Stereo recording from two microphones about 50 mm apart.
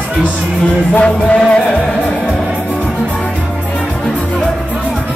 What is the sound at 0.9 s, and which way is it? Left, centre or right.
Music, left.